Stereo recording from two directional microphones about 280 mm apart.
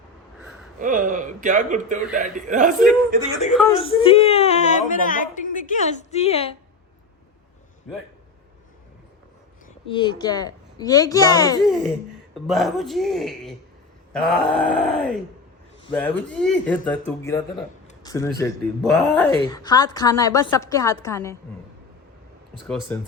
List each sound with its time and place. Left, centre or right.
0.8 s speech: right
3.5 s a man's voice: centre
3.8 s a woman's voice: centre
9.9 s a woman's voice: centre
11.6 s a man's voice: centre
18.0 s a woman's voice: centre
18.8 s a man's voice: centre
19.4 s a woman's voice: centre
22.6 s a woman's voice: centre